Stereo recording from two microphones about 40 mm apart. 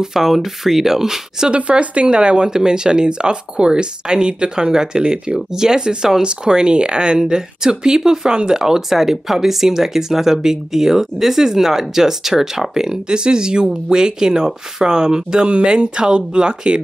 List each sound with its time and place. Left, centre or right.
0.0 s speech: centre
1.5 s speech: right